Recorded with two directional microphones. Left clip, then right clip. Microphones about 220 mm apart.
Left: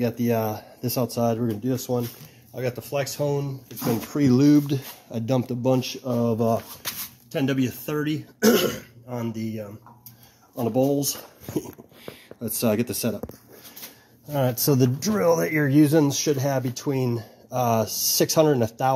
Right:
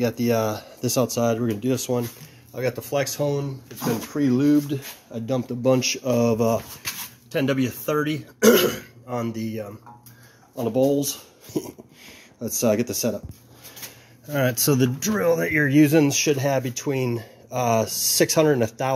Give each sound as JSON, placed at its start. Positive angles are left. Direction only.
{"t": 0.0, "sound": "speech", "side_deg": -10}
{"t": 2.5, "sound": "speech", "side_deg": 0}
{"t": 4.1, "sound": "speech", "side_deg": 30}
{"t": 5.6, "sound": "speech", "side_deg": -5}
{"t": 14.3, "sound": "speech", "side_deg": -5}